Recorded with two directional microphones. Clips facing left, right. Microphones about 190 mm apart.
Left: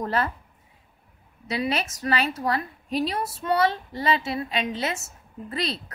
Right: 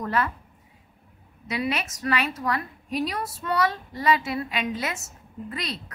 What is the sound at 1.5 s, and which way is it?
A woman's voice, 35° left (ahead or behind).